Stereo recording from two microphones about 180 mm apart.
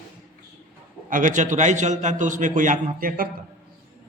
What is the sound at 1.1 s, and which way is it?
A man's voice, 45° right (ahead or behind).